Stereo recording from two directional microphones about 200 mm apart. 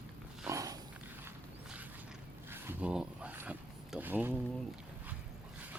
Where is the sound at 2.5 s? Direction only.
10° right (ahead or behind).